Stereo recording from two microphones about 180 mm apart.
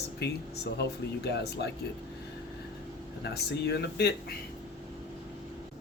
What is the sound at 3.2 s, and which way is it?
Speech, 65° left (ahead or behind).